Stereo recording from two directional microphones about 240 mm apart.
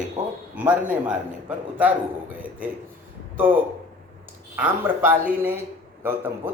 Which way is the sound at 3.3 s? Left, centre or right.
Centre.